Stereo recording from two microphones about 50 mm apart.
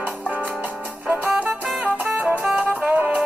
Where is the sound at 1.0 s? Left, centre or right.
Right.